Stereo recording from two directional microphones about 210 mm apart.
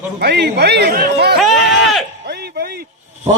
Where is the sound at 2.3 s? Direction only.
50° right (ahead or behind).